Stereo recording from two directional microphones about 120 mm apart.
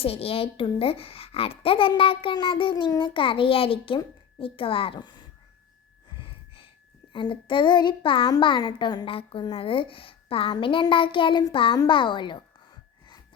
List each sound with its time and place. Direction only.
0.0 s a woman's voice: 55° left (ahead or behind)
6.1 s gasp: 45° left (ahead or behind)
7.1 s a woman's voice: 45° left (ahead or behind)
9.0 s a woman's voice: 50° left (ahead or behind)